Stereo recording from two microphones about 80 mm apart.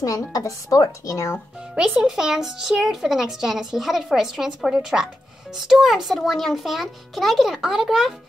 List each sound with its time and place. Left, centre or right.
0.0 s a woman's voice: left
1.8 s a child's voice: centre